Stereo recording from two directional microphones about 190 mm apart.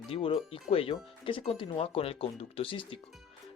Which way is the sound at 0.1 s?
30° left (ahead or behind).